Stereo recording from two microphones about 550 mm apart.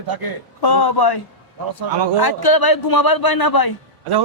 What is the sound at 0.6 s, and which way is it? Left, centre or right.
Speech, left.